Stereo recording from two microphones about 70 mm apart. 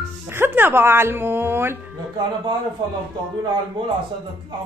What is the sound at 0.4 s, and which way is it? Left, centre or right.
A woman's voice, right.